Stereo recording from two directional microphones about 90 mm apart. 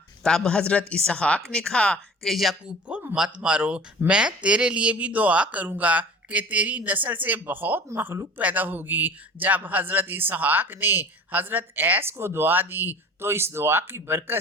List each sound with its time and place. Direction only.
0.2 s a woman's voice: 5° left (ahead or behind)
2.3 s speech: centre (ahead or behind)
2.9 s a sound: 20° right (ahead or behind)
3.2 s a man's voice: 10° right (ahead or behind); by 14.3 s 25° right (ahead or behind)